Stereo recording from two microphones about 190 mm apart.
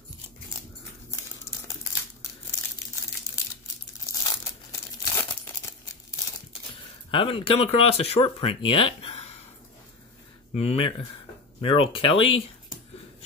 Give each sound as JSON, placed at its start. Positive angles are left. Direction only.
{"t": 4.1, "sound": "crumpling", "side_deg": 20}
{"t": 7.1, "sound": "speech", "side_deg": 30}
{"t": 10.5, "sound": "speech", "side_deg": 35}